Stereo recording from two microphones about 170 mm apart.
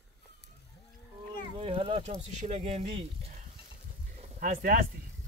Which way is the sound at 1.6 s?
30° right (ahead or behind).